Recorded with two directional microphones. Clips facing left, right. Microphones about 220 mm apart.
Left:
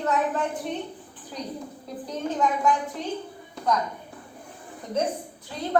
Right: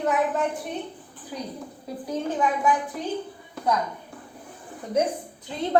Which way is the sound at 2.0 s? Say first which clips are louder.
Right 1 dB; 10° right (ahead or behind).